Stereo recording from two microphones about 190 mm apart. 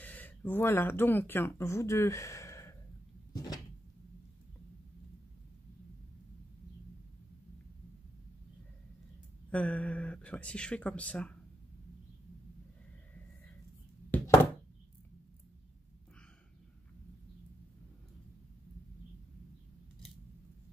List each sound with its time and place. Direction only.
0.0 s speech: 10° left (ahead or behind)
3.3 s cupboard open or close: 20° left (ahead or behind)
9.5 s speech: 5° left (ahead or behind)
14.1 s speech: 10° left (ahead or behind)